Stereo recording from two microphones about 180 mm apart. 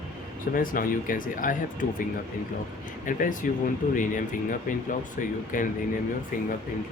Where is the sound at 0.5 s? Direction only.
50° left (ahead or behind).